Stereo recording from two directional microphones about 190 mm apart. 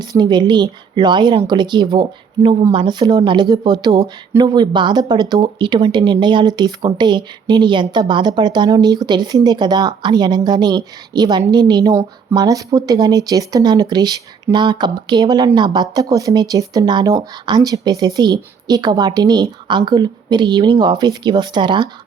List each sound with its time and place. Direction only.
0.0 s speech: 20° right (ahead or behind)